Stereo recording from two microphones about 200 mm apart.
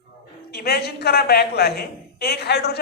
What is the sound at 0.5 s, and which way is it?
A woman's voice, 50° left (ahead or behind).